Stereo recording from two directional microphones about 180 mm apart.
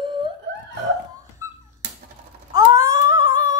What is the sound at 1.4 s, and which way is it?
Dog, 15° right (ahead or behind).